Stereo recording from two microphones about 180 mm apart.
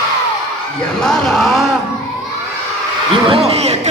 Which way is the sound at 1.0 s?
5° left (ahead or behind).